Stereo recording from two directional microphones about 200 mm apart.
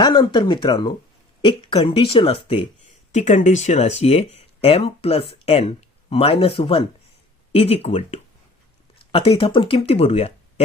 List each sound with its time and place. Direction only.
0.0 s speech: 25° left (ahead or behind)